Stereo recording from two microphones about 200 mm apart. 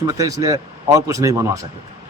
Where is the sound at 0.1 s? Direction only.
15° right (ahead or behind).